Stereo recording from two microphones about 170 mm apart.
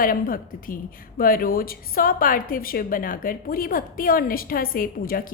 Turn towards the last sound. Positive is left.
turn(degrees=60)  # may be behind; listen again after turning